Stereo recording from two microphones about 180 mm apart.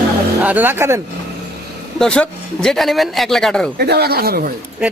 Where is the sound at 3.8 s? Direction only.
60° right (ahead or behind).